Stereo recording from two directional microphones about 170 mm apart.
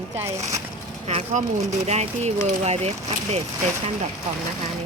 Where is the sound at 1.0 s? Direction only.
40° right (ahead or behind).